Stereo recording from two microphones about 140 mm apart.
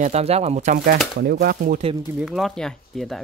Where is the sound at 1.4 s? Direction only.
90° right.